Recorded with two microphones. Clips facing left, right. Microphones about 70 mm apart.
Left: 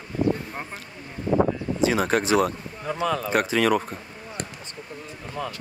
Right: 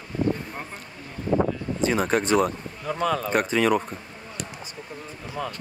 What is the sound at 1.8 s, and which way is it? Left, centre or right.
Speech, centre.